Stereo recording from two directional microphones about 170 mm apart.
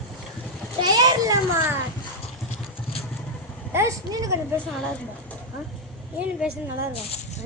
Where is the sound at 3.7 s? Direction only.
20° right (ahead or behind).